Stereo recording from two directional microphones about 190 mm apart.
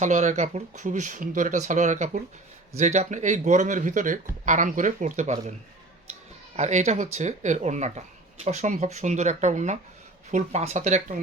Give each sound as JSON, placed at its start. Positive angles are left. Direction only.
{"t": 0.0, "sound": "speech", "side_deg": -40}
{"t": 6.6, "sound": "speech", "side_deg": -35}